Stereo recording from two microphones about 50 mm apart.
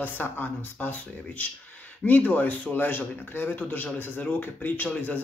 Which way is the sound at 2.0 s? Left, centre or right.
Left.